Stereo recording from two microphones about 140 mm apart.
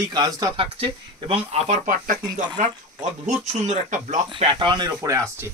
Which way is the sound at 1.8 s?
75° right (ahead or behind).